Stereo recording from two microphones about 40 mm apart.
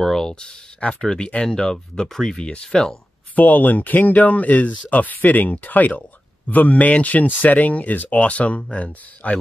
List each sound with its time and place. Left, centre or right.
0.0 s speech: centre
0.3 s speech: left
3.3 s speech: left